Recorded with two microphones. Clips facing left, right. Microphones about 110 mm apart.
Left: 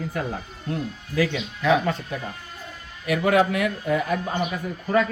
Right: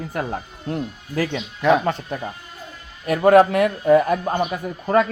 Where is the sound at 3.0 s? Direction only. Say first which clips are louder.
Right 6 dB; 40° right (ahead or behind).